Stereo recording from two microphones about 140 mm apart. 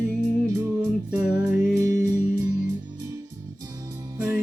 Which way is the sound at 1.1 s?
10° right (ahead or behind).